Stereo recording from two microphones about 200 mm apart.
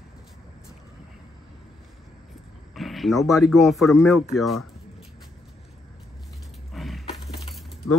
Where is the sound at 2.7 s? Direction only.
Centre (ahead or behind).